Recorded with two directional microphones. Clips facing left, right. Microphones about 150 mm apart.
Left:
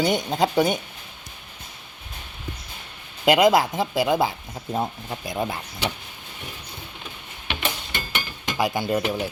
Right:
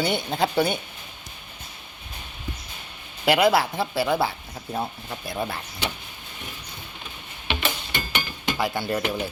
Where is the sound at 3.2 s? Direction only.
15° left (ahead or behind).